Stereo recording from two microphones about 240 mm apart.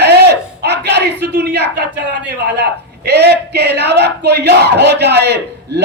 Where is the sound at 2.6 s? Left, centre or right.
Right.